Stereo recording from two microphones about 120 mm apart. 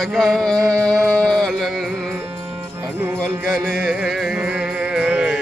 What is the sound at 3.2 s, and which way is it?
Music, 5° right (ahead or behind).